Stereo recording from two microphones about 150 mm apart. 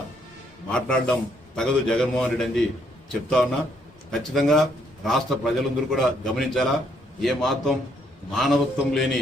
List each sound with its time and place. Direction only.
0.7 s a man's voice: 5° left (ahead or behind)